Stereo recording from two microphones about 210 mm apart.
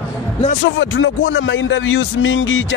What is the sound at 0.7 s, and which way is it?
Speech, 60° left (ahead or behind).